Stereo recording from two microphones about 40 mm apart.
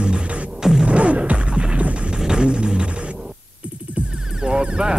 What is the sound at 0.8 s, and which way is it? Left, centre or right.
Music, right.